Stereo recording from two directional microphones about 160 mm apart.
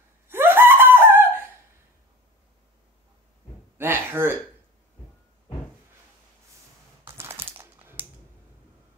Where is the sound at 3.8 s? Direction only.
15° right (ahead or behind).